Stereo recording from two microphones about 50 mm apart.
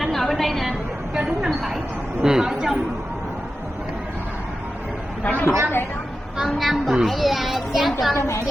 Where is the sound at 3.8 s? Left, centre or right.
Right.